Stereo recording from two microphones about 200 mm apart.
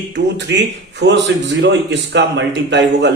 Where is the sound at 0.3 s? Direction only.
60° right (ahead or behind).